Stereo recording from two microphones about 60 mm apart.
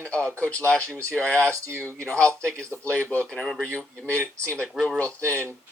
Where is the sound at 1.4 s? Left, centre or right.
Right.